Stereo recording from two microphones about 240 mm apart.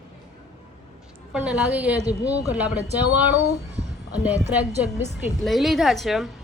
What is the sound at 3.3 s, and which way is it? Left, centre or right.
Speech, left.